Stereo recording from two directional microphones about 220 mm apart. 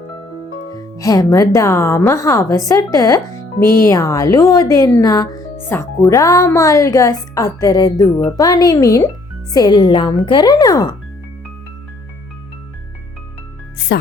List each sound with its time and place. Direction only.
0.9 s a woman's voice: 15° left (ahead or behind)
13.7 s speech: 45° left (ahead or behind)